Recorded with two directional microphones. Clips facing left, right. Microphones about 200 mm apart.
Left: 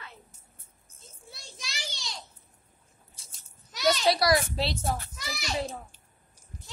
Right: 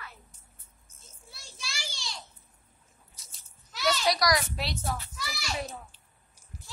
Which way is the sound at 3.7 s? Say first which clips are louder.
Left 3 dB; 20° left (ahead or behind).